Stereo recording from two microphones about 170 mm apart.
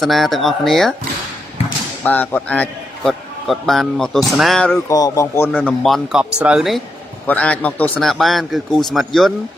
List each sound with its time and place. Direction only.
0.0 s a man's voice: centre (ahead or behind)
2.0 s a man's voice: 10° left (ahead or behind)
4.9 s a man's voice: 20° left (ahead or behind)
5.5 s a man's voice: 5° left (ahead or behind)